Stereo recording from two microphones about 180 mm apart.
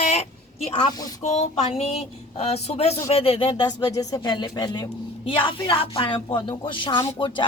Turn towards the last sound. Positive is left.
turn(degrees=25)  # may be behind; listen again after turning